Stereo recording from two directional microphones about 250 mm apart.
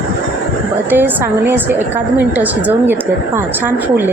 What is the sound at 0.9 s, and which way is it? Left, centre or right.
A woman's voice, centre.